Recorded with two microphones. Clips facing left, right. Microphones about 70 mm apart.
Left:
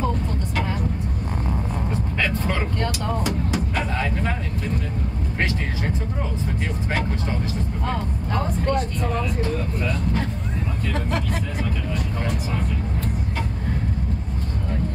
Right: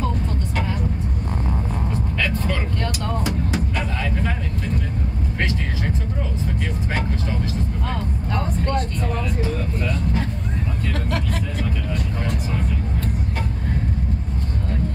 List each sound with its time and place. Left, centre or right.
2.1 s vehicle: left
3.3 s vehicle: centre
7.8 s speech: centre
9.8 s speech: centre
10.9 s speech: left